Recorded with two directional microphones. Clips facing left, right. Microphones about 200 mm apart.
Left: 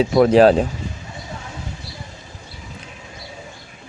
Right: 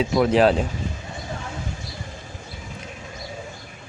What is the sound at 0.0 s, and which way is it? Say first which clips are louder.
Speech: left 5 dB; 40° left (ahead or behind).